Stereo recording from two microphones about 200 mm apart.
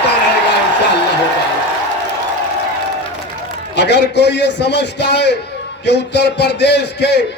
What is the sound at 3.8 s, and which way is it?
Music, 60° left (ahead or behind).